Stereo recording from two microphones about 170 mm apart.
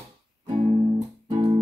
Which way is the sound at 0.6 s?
35° right (ahead or behind).